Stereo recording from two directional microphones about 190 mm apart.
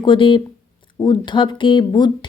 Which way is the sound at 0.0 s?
25° left (ahead or behind).